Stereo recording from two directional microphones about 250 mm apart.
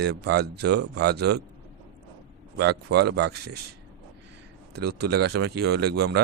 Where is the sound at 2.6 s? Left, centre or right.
Right.